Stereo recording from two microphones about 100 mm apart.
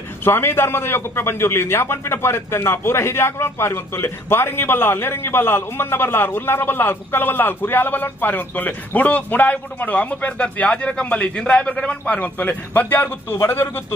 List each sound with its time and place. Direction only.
0.2 s a man's voice: 25° left (ahead or behind)